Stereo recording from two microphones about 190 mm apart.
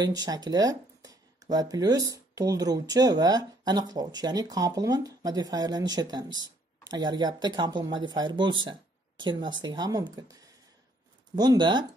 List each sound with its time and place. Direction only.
0.0 s speech: 20° right (ahead or behind)